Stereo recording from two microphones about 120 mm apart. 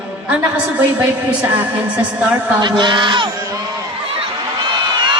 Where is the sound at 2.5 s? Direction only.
40° right (ahead or behind).